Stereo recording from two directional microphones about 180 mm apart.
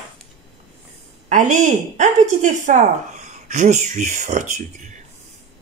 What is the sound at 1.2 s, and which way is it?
A woman's voice, 45° right (ahead or behind).